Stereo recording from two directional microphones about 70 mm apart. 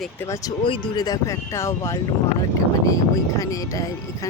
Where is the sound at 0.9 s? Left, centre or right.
Left.